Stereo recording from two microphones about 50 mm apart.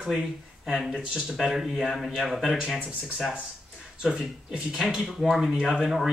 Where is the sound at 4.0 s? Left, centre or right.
Centre.